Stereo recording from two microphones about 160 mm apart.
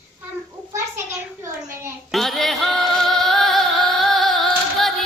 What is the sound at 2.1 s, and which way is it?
Music, centre (ahead or behind).